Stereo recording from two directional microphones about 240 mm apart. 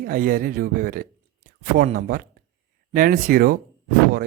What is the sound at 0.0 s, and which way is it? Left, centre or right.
Speech, right.